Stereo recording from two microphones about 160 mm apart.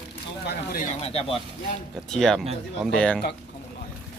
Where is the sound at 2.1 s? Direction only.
5° left (ahead or behind).